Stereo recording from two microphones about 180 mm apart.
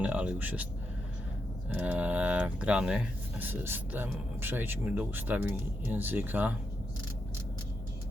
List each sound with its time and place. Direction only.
0.0 s speech: 10° right (ahead or behind)
1.7 s speech: 10° right (ahead or behind)